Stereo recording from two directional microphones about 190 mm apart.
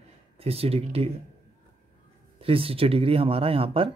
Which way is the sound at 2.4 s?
30° right (ahead or behind).